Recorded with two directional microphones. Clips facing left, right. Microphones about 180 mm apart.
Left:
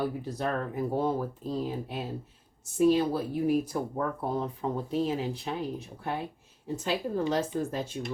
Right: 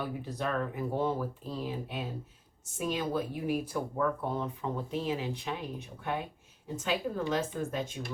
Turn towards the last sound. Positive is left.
turn(degrees=35)  # may be behind; listen again after turning